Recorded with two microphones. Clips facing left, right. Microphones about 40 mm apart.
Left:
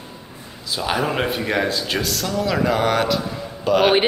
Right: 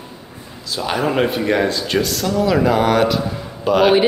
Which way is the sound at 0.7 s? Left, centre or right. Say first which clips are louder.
Right 2 dB; centre.